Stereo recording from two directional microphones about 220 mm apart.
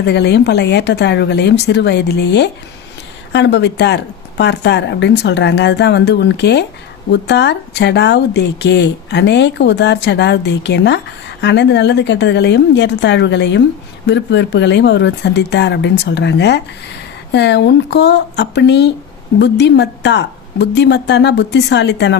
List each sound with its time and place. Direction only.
0.0 s speech: 50° left (ahead or behind)